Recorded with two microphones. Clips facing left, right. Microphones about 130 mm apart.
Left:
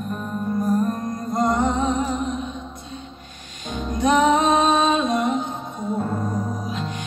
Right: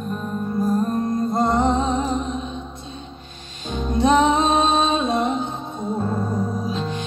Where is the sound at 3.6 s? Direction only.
25° right (ahead or behind).